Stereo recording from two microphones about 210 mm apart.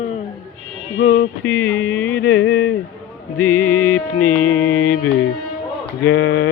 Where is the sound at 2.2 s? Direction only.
50° left (ahead or behind).